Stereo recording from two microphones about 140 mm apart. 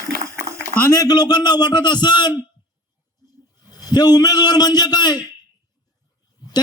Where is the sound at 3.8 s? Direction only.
30° left (ahead or behind).